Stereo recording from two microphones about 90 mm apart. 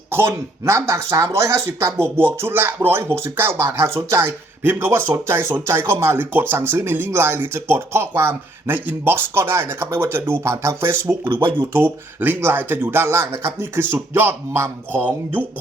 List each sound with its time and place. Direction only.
0.1 s speech: 30° right (ahead or behind)
11.3 s speech: 65° right (ahead or behind)
11.5 s speech: 25° right (ahead or behind)